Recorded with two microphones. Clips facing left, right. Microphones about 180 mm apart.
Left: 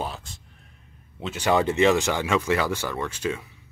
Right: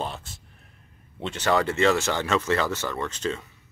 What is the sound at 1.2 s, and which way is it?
Speech, 10° left (ahead or behind).